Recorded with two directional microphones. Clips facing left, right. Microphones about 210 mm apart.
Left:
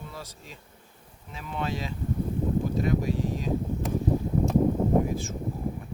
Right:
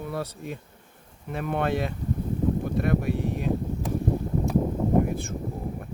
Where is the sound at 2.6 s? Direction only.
60° right (ahead or behind).